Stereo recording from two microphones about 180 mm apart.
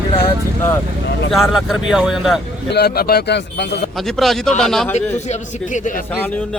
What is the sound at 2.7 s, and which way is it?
Speech, 60° left (ahead or behind).